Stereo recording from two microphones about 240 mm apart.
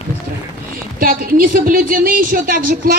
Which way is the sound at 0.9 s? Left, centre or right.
Right.